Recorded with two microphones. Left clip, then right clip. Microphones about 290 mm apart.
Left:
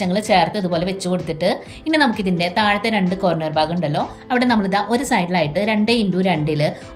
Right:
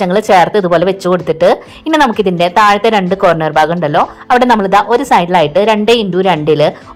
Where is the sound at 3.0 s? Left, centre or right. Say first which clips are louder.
Right 10 dB; right.